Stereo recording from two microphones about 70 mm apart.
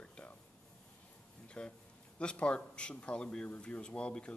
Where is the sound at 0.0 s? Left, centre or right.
Centre.